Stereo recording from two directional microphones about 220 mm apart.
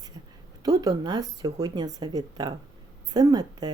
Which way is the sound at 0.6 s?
15° right (ahead or behind).